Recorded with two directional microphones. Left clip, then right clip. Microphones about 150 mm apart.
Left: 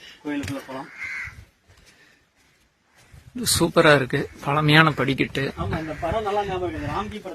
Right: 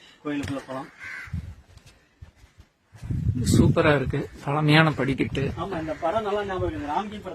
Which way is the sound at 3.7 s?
25° left (ahead or behind).